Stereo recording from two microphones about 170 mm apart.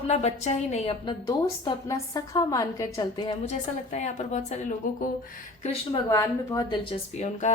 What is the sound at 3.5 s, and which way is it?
Speech, 40° left (ahead or behind).